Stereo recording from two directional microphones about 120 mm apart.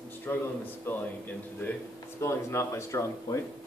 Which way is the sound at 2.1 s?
25° left (ahead or behind).